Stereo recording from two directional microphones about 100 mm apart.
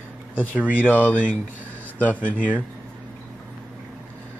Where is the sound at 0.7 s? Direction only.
20° left (ahead or behind).